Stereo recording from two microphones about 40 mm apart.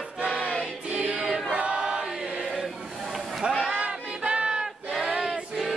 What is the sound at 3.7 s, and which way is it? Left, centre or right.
Battle cry, right.